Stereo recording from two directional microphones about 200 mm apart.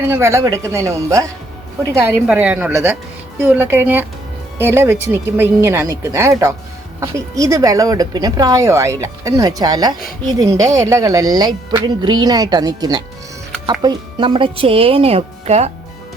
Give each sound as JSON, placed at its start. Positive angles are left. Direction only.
{"t": 0.0, "sound": "speech", "side_deg": -15}